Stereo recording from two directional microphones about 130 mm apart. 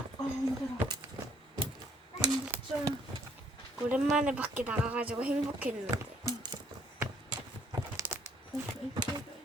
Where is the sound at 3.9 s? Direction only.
5° right (ahead or behind).